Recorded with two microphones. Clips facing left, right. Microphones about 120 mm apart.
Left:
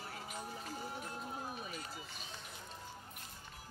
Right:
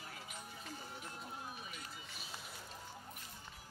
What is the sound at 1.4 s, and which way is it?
Run, 40° left (ahead or behind).